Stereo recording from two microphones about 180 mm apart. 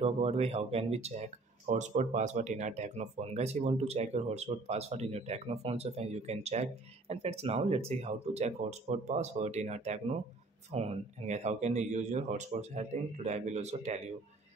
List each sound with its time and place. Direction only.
0.0 s speech: 35° right (ahead or behind)